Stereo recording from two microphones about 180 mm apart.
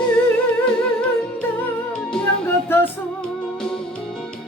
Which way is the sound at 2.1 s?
10° left (ahead or behind).